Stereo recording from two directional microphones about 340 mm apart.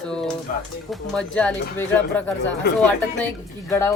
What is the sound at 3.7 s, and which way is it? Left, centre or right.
Speech, centre.